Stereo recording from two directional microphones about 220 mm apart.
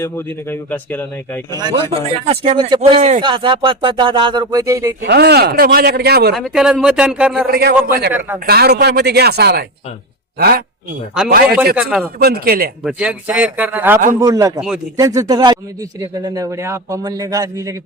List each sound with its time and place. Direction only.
0.5 s speech: 5° left (ahead or behind)
1.5 s speech: 20° right (ahead or behind)
5.0 s a man's voice: 45° right (ahead or behind)
6.3 s speech: centre (ahead or behind)
7.9 s a man's voice: 45° right (ahead or behind)
11.4 s speech: 5° right (ahead or behind)
12.2 s a man's voice: 45° right (ahead or behind)
12.8 s a man's voice: 5° right (ahead or behind)